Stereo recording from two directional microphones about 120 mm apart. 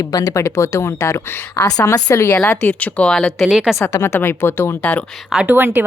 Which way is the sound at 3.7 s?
20° left (ahead or behind).